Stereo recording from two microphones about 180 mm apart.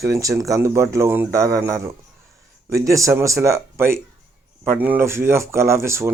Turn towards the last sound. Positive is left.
turn(degrees=-15)  # may be behind; listen again after turning